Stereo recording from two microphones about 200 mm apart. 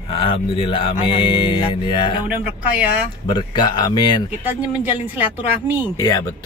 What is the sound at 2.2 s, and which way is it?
Speech, 5° right (ahead or behind).